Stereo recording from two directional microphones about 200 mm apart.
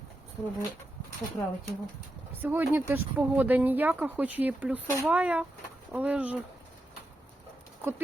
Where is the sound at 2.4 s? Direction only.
10° right (ahead or behind).